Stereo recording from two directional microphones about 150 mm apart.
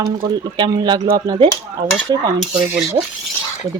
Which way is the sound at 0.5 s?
30° right (ahead or behind).